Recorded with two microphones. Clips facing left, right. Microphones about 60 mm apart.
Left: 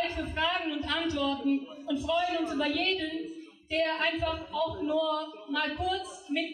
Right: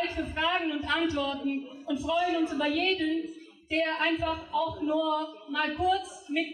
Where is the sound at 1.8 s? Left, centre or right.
Centre.